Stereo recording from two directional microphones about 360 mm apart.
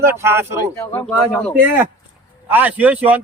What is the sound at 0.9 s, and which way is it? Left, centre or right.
A man's voice, centre.